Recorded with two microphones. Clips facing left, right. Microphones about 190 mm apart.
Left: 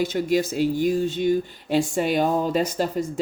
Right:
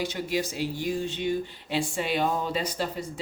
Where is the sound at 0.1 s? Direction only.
45° left (ahead or behind).